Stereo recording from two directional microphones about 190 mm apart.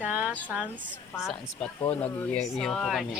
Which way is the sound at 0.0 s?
5° right (ahead or behind).